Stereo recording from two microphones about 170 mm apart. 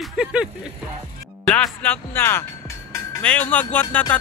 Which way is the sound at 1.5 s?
10° left (ahead or behind).